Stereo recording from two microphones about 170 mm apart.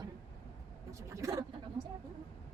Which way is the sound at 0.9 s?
20° right (ahead or behind).